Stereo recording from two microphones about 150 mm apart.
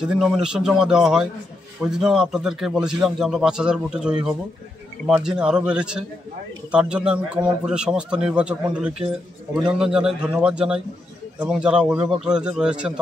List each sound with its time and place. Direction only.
0.0 s a man's voice: 5° right (ahead or behind)